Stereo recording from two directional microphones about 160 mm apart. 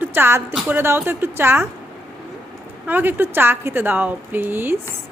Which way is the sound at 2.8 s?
10° right (ahead or behind).